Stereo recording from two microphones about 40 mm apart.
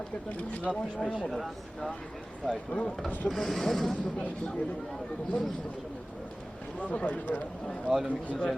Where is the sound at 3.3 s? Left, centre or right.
Centre.